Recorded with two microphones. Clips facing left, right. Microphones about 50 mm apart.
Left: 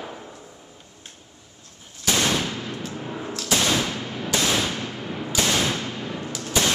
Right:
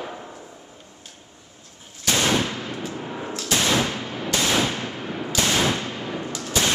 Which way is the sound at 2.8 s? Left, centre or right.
Centre.